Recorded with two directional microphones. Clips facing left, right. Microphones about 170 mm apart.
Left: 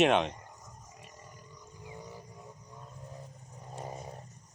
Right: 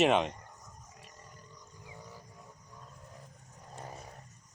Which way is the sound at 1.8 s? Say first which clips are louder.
Left 5 dB; 15° left (ahead or behind).